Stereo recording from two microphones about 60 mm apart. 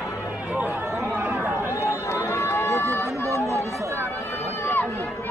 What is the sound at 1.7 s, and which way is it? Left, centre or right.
Run, left.